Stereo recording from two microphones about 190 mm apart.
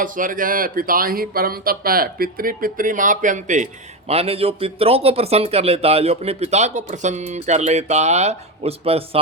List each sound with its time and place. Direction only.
0.0 s speech: 45° right (ahead or behind)